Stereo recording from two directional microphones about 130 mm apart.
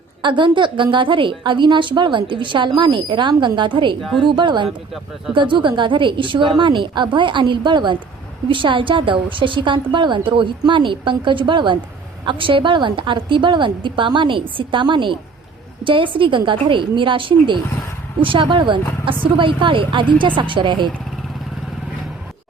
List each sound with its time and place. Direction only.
0.2 s a woman's voice: 40° right (ahead or behind)